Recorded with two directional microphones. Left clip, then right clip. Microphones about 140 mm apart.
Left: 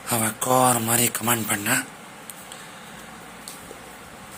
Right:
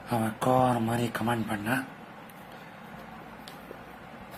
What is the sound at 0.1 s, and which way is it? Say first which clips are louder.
Speech: left 4 dB; 15° left (ahead or behind).